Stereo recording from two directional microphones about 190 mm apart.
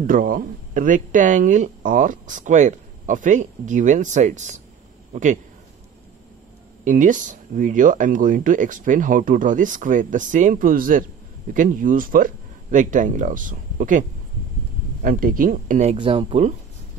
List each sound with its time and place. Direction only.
0.0 s a man's voice: 45° right (ahead or behind)
6.8 s speech: 40° right (ahead or behind)
15.0 s speech: 45° right (ahead or behind)
16.0 s speech: 30° right (ahead or behind)